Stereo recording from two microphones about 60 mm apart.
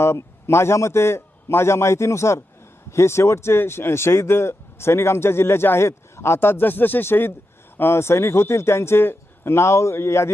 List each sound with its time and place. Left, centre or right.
0.0 s speech: left